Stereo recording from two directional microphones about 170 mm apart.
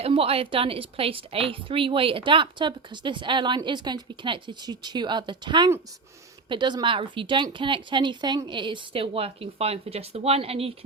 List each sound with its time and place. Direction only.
0.0 s a woman's voice: 35° right (ahead or behind)